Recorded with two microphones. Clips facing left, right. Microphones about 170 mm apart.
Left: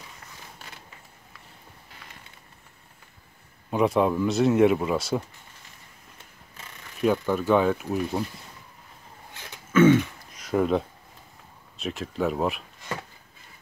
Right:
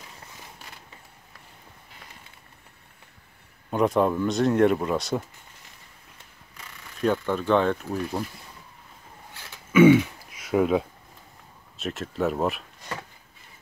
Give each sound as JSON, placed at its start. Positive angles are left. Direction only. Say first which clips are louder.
{"t": 3.7, "sound": "speech", "louder": "even", "side_deg": 0}
{"t": 7.0, "sound": "speech", "louder": "left 1 dB", "side_deg": 5}
{"t": 9.7, "sound": "throat clearing", "louder": "right 2 dB", "side_deg": -10}
{"t": 11.8, "sound": "speech", "louder": "even", "side_deg": 0}